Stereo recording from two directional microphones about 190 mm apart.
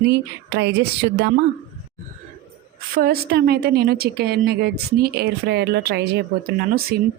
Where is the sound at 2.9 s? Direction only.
50° right (ahead or behind).